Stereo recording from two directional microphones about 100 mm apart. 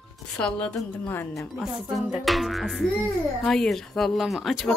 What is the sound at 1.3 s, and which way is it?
Speech, centre (ahead or behind).